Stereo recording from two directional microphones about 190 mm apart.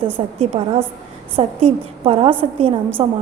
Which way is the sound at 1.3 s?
30° right (ahead or behind).